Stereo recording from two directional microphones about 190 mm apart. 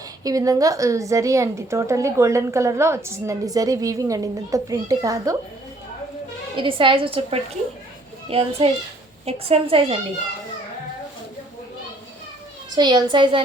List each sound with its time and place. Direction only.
0.3 s a woman's voice: 20° right (ahead or behind)
6.6 s a woman's voice: 25° right (ahead or behind)
12.7 s a woman's voice: 20° right (ahead or behind)